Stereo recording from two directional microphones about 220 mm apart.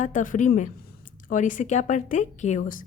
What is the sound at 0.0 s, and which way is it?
Speech, 35° left (ahead or behind).